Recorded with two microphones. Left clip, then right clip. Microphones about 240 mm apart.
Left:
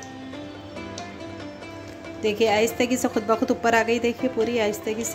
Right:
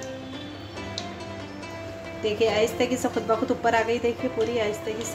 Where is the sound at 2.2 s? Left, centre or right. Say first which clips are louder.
Left 2 dB; left.